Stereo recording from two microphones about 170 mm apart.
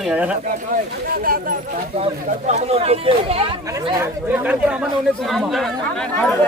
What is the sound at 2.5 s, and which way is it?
Speech, 40° right (ahead or behind).